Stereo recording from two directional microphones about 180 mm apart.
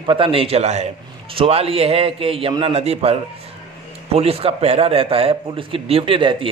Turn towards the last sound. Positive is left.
turn(degrees=-30)  # may be behind; listen again after turning